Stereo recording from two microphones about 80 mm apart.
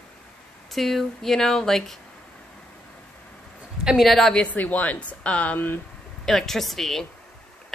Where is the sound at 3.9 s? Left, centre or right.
Centre.